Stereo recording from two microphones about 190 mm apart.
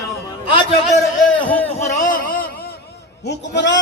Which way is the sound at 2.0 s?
45° left (ahead or behind).